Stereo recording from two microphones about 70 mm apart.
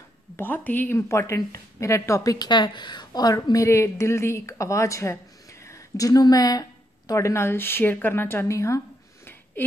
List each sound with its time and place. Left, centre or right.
0.4 s speech: left
0.9 s a woman's voice: left
2.3 s a woman's voice: left
5.5 s a sound: left
6.2 s a woman's voice: left